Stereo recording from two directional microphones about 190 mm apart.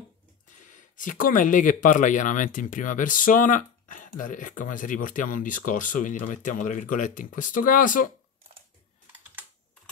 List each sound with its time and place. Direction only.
0.5 s speech: 40° left (ahead or behind)